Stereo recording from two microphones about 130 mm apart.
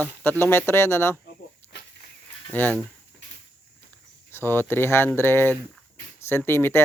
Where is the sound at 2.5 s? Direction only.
15° left (ahead or behind).